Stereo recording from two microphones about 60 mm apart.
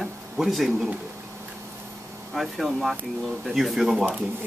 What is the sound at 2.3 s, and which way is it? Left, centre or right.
A man's voice, centre.